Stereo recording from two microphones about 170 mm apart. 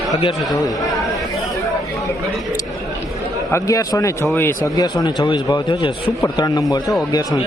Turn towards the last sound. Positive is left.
turn(degrees=25)  # may be behind; listen again after turning